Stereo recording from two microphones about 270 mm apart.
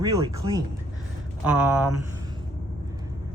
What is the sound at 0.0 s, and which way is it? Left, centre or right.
Speech, centre.